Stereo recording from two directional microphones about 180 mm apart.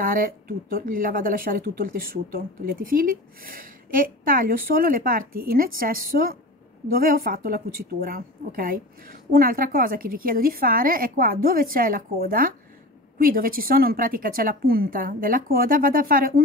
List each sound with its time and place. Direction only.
0.0 s a woman's voice: 50° right (ahead or behind)